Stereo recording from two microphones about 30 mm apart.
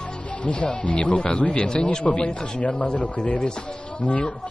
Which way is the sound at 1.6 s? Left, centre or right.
Left.